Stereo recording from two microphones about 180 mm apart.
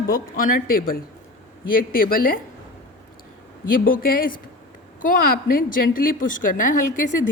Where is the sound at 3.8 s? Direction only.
55° left (ahead or behind).